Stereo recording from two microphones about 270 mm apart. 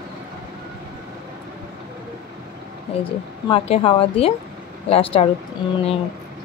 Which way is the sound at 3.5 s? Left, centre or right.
Centre.